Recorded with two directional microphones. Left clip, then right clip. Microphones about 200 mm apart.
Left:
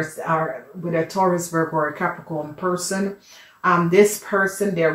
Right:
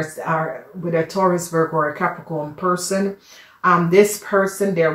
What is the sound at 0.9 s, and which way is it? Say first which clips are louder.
Speech: right 2 dB; 30° right (ahead or behind).